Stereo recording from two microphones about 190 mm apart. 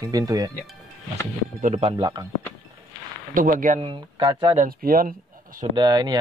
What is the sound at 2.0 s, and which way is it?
Speech, 20° right (ahead or behind).